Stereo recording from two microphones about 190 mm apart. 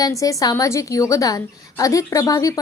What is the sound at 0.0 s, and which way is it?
A woman's voice, 15° left (ahead or behind).